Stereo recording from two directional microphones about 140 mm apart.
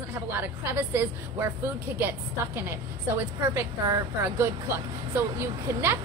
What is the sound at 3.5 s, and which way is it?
A woman's voice, 20° right (ahead or behind).